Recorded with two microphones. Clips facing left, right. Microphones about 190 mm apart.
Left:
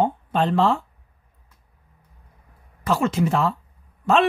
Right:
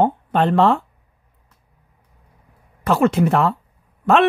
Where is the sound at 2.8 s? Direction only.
60° right (ahead or behind).